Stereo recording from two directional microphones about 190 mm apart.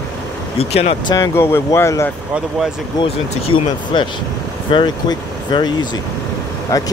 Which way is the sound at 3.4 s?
25° left (ahead or behind).